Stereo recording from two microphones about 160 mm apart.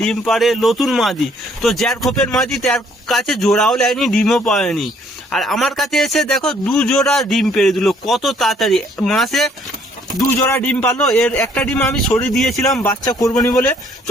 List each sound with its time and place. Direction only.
0.0 s a man's voice: centre (ahead or behind)
10.3 s speech: 15° left (ahead or behind)
10.9 s a man's voice: centre (ahead or behind)
11.3 s speech: 15° left (ahead or behind)
12.3 s a man's voice: centre (ahead or behind)
12.8 s speech: 20° left (ahead or behind)